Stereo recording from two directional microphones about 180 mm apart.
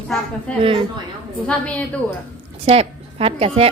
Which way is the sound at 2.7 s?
35° right (ahead or behind).